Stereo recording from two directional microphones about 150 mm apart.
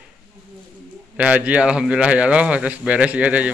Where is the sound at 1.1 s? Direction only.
10° right (ahead or behind).